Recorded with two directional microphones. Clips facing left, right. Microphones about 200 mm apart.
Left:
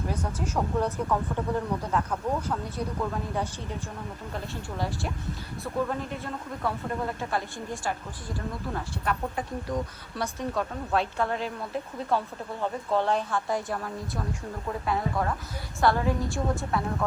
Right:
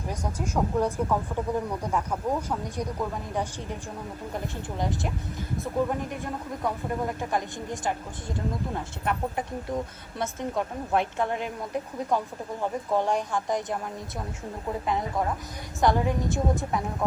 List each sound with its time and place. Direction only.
0.2 s speech: 10° right (ahead or behind)